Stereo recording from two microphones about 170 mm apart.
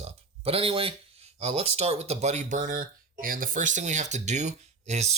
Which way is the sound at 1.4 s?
40° right (ahead or behind).